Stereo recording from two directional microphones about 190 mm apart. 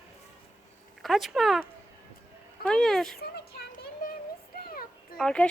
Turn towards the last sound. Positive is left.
turn(degrees=5)  # may be behind; listen again after turning